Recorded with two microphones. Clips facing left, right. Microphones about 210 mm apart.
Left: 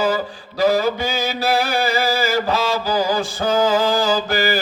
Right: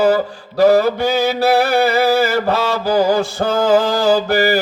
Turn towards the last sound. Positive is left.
turn(degrees=-65)  # may be behind; listen again after turning